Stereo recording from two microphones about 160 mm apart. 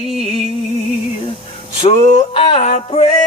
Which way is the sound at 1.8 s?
35° left (ahead or behind).